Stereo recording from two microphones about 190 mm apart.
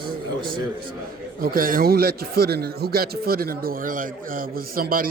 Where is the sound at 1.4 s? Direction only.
50° right (ahead or behind).